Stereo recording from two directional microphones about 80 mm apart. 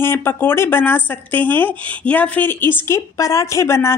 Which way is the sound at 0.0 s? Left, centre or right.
Left.